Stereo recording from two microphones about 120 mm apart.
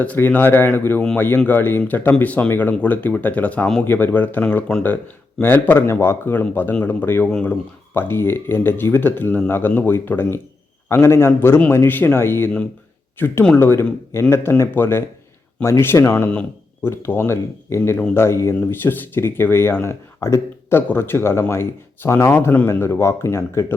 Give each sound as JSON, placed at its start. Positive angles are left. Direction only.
{"t": 0.0, "sound": "speech", "side_deg": 15}